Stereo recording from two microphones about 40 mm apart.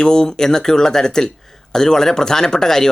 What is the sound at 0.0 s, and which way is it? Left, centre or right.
Speech, centre.